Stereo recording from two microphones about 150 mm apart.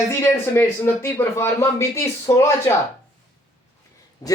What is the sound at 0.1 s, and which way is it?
Speech, 15° left (ahead or behind).